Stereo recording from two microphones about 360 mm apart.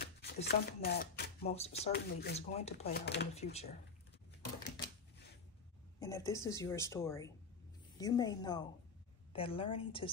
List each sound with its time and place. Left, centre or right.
0.0 s speech: left
5.9 s speech: centre